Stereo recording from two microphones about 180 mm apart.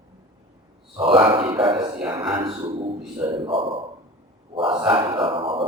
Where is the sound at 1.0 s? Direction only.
30° right (ahead or behind).